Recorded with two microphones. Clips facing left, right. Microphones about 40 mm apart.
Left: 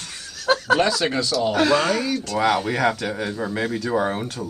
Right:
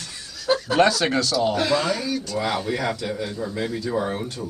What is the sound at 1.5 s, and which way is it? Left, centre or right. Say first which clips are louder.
A man's voice: left 3 dB; left.